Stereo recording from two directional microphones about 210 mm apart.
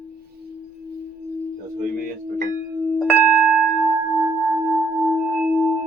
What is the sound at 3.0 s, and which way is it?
Wind chime, 10° right (ahead or behind).